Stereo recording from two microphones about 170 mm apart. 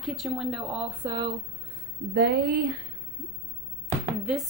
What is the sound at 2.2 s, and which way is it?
Speech, 60° right (ahead or behind).